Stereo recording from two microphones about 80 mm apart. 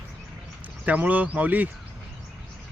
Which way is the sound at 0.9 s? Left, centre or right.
Centre.